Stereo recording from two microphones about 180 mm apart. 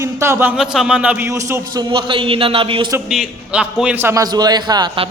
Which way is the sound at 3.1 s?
5° right (ahead or behind).